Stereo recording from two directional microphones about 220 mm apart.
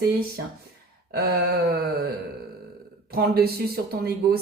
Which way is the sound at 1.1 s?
45° right (ahead or behind).